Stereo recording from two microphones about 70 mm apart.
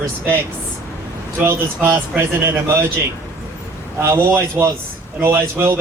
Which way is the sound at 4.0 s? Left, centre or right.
Right.